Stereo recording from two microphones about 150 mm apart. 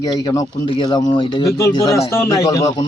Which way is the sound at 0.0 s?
25° left (ahead or behind).